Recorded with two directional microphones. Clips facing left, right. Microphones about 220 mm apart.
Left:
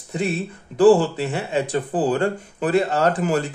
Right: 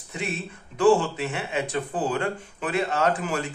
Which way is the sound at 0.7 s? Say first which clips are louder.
Left 5 dB; 35° left (ahead or behind).